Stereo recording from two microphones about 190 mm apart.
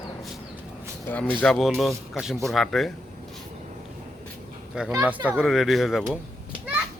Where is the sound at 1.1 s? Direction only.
5° left (ahead or behind).